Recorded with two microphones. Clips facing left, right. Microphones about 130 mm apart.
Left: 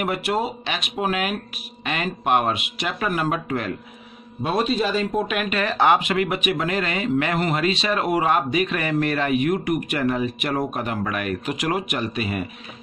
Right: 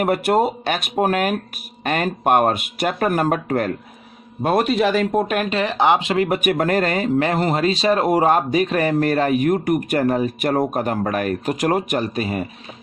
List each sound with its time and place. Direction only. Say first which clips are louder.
0.0 s speech: right 6 dB; 45° right (ahead or behind); by 5.2 s 65° right (ahead or behind)
5.3 s speech: right 4 dB; 40° right (ahead or behind)
5.6 s speech: even; 20° right (ahead or behind); by 12.4 s 40° right (ahead or behind)